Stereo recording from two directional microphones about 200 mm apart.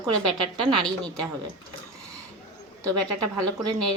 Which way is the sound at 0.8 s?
5° left (ahead or behind).